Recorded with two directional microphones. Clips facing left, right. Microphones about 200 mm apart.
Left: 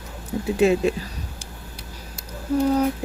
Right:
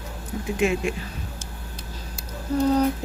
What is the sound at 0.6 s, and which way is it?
Speech, 35° left (ahead or behind).